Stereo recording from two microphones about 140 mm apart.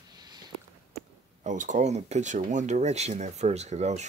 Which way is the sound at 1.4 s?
65° right (ahead or behind).